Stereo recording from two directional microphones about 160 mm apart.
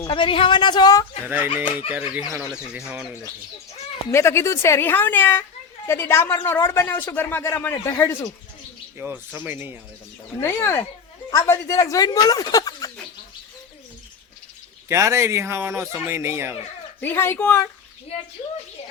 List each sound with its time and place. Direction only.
0.1 s speech: 35° left (ahead or behind)
1.9 s speech: 10° right (ahead or behind)
4.1 s speech: 15° left (ahead or behind)
9.0 s speech: 10° right (ahead or behind)
10.4 s speech: 15° left (ahead or behind)
14.8 s speech: 15° right (ahead or behind)
17.0 s speech: 15° left (ahead or behind)